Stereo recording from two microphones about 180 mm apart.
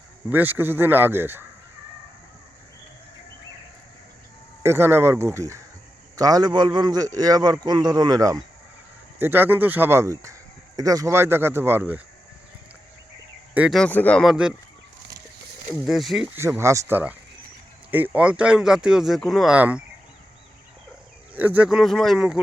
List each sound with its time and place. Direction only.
0.3 s speech: 10° right (ahead or behind)
4.6 s a man's voice: 15° right (ahead or behind)
13.5 s speech: 5° right (ahead or behind)
15.7 s speech: centre (ahead or behind)
21.3 s speech: 10° right (ahead or behind)